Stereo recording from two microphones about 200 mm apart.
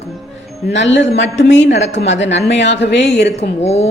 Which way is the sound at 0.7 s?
65° left (ahead or behind).